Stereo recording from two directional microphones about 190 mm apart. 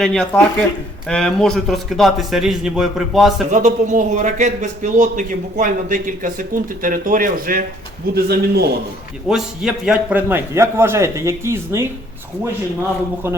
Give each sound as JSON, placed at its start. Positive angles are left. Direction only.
{"t": 0.0, "sound": "a man's voice", "side_deg": 5}
{"t": 3.5, "sound": "a man's voice", "side_deg": -40}
{"t": 9.3, "sound": "a man's voice", "side_deg": -5}